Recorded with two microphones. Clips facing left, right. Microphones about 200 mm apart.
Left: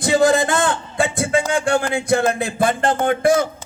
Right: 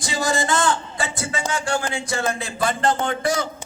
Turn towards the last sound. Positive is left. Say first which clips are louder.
# left 7 dB
turn(degrees=55)  # may be behind; listen again after turning